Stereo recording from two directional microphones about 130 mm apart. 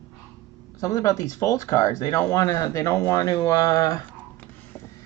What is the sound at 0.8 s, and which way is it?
Speech, 25° left (ahead or behind).